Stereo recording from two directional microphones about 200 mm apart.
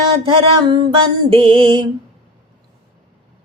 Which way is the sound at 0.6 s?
25° right (ahead or behind).